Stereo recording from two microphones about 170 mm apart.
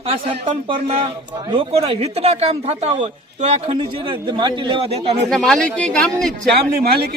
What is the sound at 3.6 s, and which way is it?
A man's voice, 25° right (ahead or behind).